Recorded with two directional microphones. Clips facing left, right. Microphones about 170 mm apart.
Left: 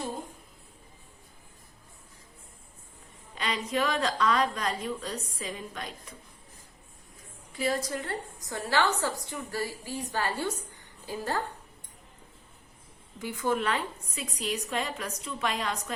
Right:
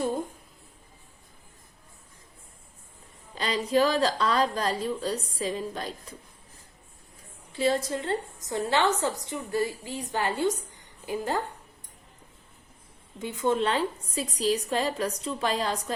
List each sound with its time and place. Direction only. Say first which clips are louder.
3.3 s a woman's voice: right 6 dB; 35° right (ahead or behind)
7.5 s a woman's voice: right 4 dB; 25° right (ahead or behind)
13.1 s a woman's voice: right 3 dB; 25° right (ahead or behind)